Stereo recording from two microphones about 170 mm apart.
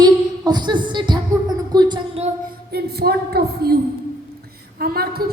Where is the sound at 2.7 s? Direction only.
70° right (ahead or behind).